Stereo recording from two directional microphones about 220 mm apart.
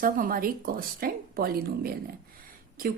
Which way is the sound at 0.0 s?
40° right (ahead or behind).